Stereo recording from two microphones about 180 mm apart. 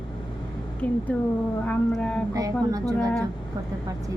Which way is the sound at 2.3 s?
20° right (ahead or behind).